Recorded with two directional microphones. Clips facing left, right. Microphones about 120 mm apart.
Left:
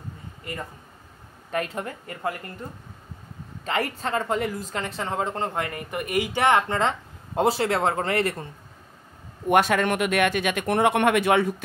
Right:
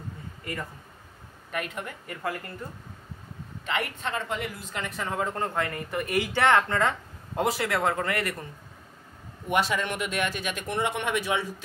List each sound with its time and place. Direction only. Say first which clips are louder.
1.5 s speech: left 5 dB; 30° left (ahead or behind)
3.6 s speech: left 4 dB; 35° left (ahead or behind)
9.5 s speech: left 6 dB; 55° left (ahead or behind)